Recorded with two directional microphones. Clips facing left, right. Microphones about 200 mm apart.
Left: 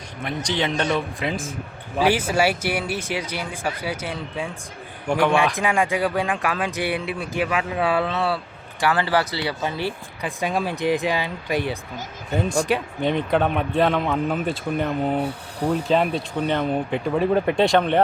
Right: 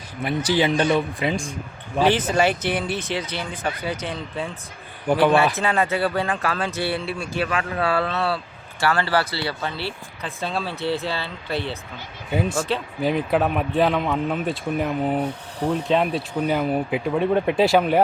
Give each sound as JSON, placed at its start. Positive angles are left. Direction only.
{"t": 0.2, "sound": "speech", "side_deg": -5}
{"t": 5.5, "sound": "speech", "side_deg": 15}
{"t": 12.3, "sound": "speech", "side_deg": -5}